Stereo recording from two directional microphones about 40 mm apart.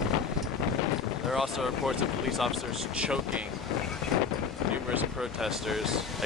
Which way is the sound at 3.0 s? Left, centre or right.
Right.